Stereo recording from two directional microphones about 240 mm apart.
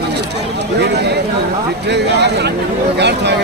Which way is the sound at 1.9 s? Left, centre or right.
Right.